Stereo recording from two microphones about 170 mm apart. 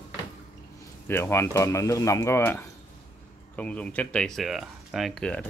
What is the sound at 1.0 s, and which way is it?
Speech, 15° left (ahead or behind).